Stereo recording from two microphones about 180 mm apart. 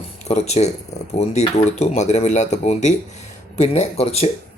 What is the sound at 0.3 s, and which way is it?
Speech, 35° left (ahead or behind).